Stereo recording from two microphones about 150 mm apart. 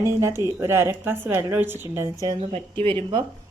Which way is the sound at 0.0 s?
20° right (ahead or behind).